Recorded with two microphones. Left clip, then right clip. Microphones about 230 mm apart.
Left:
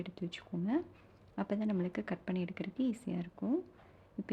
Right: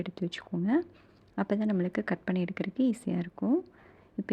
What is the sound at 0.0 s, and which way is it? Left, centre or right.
A woman's voice, centre.